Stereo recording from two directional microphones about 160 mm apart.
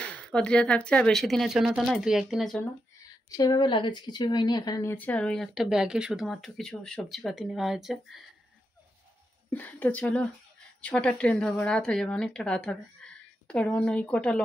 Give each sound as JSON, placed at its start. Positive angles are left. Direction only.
{"t": 0.0, "sound": "a woman's voice", "side_deg": 5}
{"t": 3.3, "sound": "a woman's voice", "side_deg": 25}
{"t": 4.9, "sound": "a woman's voice", "side_deg": 10}
{"t": 9.5, "sound": "a woman's voice", "side_deg": 10}